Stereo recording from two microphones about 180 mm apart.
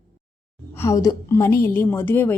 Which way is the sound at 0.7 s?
15° left (ahead or behind).